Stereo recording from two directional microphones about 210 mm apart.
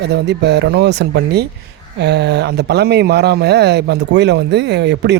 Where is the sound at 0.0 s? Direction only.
50° right (ahead or behind).